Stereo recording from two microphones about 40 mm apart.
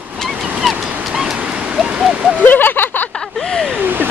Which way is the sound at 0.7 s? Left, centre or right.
Centre.